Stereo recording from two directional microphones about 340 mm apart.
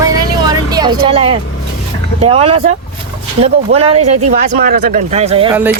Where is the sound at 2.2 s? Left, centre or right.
Centre.